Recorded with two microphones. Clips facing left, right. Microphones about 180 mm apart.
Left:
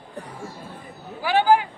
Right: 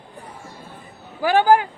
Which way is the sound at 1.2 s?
45° right (ahead or behind).